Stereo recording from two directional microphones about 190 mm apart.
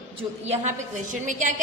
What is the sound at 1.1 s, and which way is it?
Speech, 40° right (ahead or behind).